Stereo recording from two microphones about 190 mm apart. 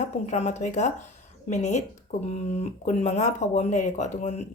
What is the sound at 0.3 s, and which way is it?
Speech, 35° left (ahead or behind).